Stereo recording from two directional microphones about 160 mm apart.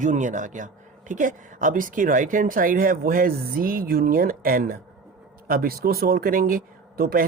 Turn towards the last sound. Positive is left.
turn(degrees=-65)  # may be behind; listen again after turning